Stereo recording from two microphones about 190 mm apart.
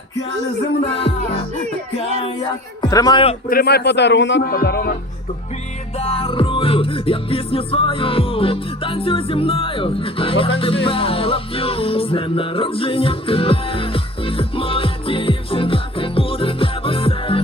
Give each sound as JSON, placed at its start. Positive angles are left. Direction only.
{"t": 2.9, "sound": "speech", "side_deg": 20}
{"t": 3.5, "sound": "a man's voice", "side_deg": 55}
{"t": 6.0, "sound": "music", "side_deg": 30}